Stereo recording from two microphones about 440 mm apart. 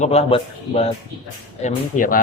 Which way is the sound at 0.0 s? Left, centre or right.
Centre.